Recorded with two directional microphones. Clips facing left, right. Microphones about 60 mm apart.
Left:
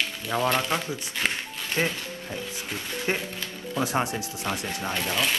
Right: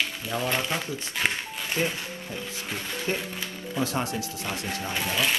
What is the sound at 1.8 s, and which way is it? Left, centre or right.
Speech, left.